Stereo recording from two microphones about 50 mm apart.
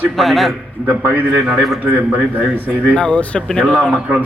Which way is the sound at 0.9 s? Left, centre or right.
Right.